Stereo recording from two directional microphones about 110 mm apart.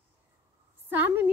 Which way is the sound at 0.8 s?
15° right (ahead or behind).